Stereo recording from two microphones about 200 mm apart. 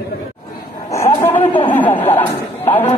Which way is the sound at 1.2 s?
30° left (ahead or behind).